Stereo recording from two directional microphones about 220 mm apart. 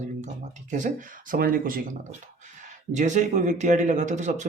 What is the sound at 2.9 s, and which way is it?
Speech, 35° right (ahead or behind).